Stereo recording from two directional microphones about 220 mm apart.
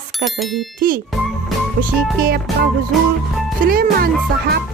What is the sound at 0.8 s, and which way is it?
Speech, 40° right (ahead or behind).